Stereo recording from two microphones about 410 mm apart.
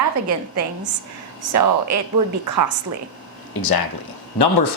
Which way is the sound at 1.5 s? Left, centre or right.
Right.